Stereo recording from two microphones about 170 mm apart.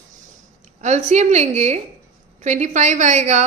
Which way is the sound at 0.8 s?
40° right (ahead or behind).